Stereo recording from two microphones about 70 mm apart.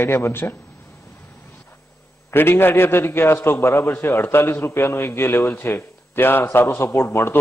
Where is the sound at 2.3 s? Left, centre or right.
Left.